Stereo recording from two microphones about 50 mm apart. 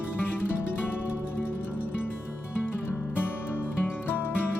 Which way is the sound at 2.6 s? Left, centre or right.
Left.